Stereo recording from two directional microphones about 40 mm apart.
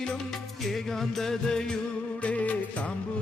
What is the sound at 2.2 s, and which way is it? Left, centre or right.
Music, left.